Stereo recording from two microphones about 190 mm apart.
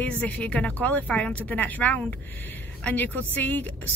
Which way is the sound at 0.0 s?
10° left (ahead or behind).